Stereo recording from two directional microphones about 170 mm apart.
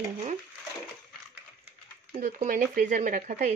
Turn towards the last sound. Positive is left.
turn(degrees=-45)  # may be behind; listen again after turning